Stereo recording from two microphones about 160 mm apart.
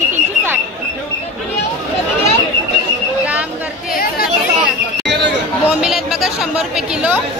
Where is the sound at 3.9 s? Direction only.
70° left (ahead or behind).